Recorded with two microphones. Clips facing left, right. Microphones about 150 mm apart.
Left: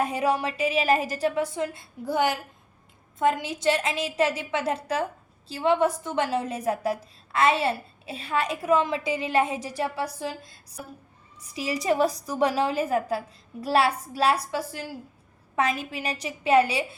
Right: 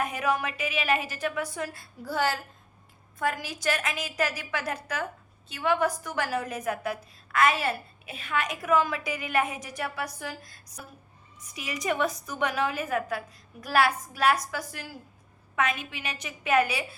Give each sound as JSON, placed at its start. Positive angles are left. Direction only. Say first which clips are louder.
{"t": 0.0, "sound": "a woman's voice", "louder": "left 3 dB", "side_deg": 30}